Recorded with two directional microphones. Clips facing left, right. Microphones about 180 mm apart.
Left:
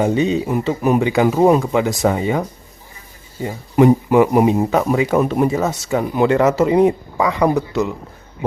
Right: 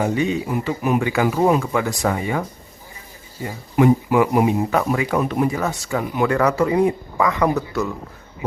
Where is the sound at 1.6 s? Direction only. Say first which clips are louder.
Left 4 dB; 20° left (ahead or behind).